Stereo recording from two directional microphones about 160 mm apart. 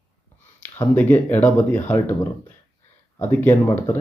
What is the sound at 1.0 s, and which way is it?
Speech, 10° left (ahead or behind).